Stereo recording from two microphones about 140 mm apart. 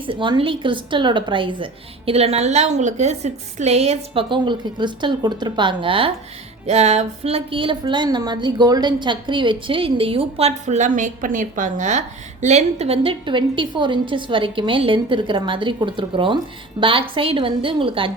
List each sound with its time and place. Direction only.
0.0 s a woman's voice: 35° right (ahead or behind)
6.7 s a woman's voice: 50° right (ahead or behind)